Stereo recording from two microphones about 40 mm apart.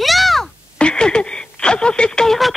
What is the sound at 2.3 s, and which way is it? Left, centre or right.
Speech, centre.